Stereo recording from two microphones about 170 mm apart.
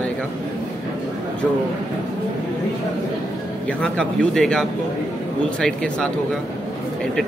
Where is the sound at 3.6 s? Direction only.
5° left (ahead or behind).